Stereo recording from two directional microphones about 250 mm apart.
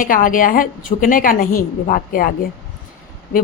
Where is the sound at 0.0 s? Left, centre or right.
Left.